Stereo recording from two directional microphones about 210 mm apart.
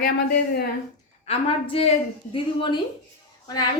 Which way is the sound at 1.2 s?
30° left (ahead or behind).